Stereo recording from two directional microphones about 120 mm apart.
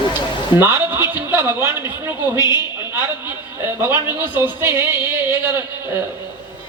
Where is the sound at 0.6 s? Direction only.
20° right (ahead or behind).